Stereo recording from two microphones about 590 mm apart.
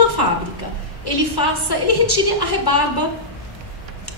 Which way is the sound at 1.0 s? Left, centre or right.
Left.